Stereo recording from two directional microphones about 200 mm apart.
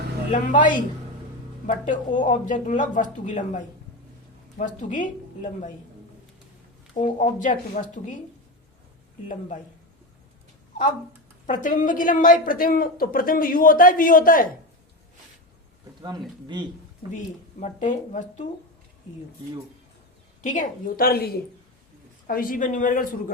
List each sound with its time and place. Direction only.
0.3 s speech: 40° left (ahead or behind)
6.9 s speech: 40° left (ahead or behind)
11.4 s speech: 40° left (ahead or behind)
16.0 s a man's voice: 20° right (ahead or behind)
17.2 s speech: 40° left (ahead or behind)
20.4 s speech: 40° left (ahead or behind)
22.3 s speech: 45° left (ahead or behind)